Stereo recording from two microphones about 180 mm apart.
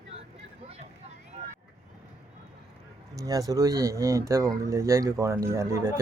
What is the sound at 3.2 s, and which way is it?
Speech, 20° right (ahead or behind).